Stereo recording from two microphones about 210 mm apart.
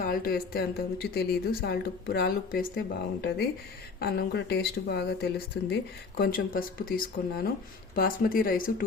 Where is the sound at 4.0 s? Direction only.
50° left (ahead or behind).